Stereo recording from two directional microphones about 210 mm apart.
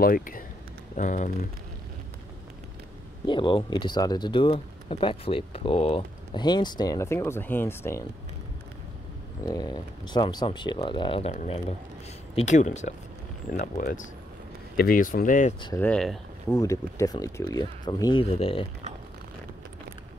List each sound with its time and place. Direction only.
0.0 s speech: 45° left (ahead or behind)
3.3 s speech: 25° left (ahead or behind)
9.5 s speech: 20° left (ahead or behind); by 15.5 s 40° left (ahead or behind)
15.6 s speech: 15° left (ahead or behind)
15.9 s speech: 5° left (ahead or behind)
16.5 s speech: 15° left (ahead or behind)